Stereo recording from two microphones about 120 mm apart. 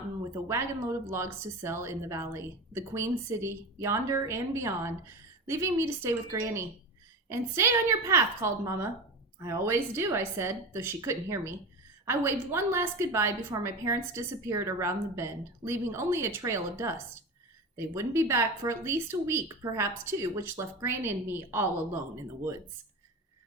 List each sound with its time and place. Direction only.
0.4 s speech: 25° right (ahead or behind)